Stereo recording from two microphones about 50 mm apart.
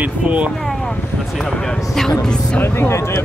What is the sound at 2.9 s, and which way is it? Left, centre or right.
Speech, left.